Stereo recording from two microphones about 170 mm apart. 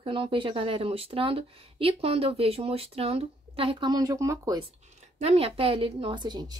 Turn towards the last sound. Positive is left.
turn(degrees=-25)  # may be behind; listen again after turning